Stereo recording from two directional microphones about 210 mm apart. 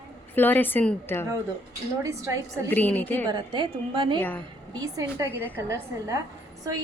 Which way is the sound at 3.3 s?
25° right (ahead or behind).